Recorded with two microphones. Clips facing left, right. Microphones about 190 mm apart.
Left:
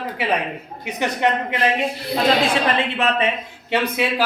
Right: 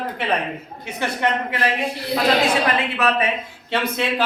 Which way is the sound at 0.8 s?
15° left (ahead or behind).